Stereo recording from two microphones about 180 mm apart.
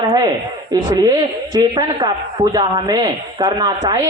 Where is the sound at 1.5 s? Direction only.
25° right (ahead or behind).